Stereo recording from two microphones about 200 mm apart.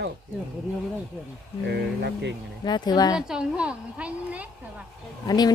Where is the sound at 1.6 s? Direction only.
55° right (ahead or behind).